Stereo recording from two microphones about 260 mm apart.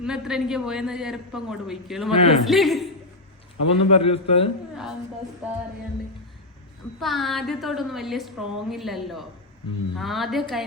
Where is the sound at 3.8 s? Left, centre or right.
Left.